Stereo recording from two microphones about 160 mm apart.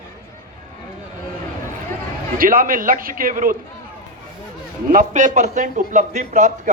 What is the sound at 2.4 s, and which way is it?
A man's voice, 60° right (ahead or behind).